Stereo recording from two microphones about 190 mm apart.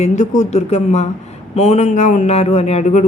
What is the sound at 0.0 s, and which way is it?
A woman's voice, 35° left (ahead or behind).